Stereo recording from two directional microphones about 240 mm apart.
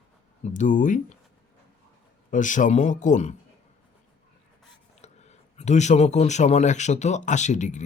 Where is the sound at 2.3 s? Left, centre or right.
Left.